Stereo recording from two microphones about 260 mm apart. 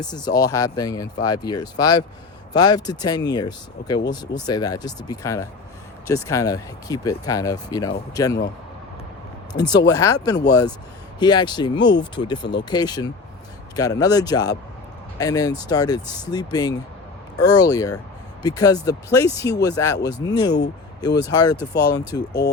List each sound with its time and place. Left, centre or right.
0.0 s speech: centre
9.9 s speech: centre